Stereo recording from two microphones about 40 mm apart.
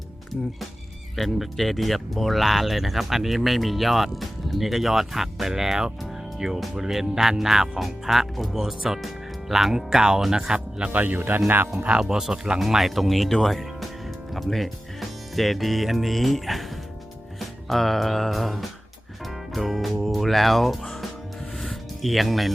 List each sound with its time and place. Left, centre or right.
1.1 s speech: centre; by 10.9 s right
10.9 s speech: right
11.2 s speech: right
11.9 s speech: centre
12.5 s speech: centre
19.2 s music: centre
20.0 s speech: centre
21.6 s music: centre